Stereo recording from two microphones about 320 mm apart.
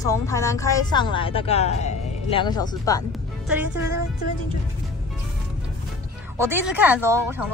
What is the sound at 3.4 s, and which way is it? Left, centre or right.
Speech, centre.